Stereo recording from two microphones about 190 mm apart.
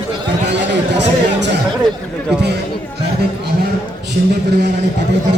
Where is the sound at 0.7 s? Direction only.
65° right (ahead or behind).